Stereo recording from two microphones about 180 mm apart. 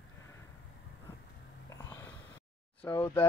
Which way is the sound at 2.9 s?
15° left (ahead or behind).